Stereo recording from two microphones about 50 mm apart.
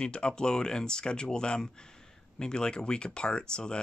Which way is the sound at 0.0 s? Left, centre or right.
Centre.